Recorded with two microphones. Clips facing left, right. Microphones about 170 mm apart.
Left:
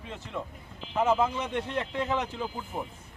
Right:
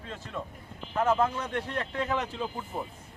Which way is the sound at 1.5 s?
15° left (ahead or behind).